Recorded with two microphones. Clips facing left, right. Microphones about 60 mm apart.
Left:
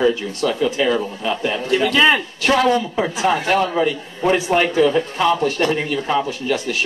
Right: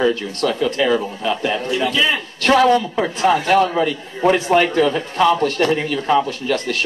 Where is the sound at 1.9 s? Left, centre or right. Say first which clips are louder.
Left 5 dB; left.